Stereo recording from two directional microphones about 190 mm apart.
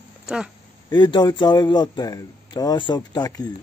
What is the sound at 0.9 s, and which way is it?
Speech, 25° left (ahead or behind).